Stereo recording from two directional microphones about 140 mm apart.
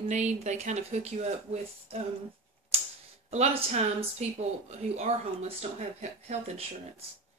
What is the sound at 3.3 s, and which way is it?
Speech, 45° right (ahead or behind).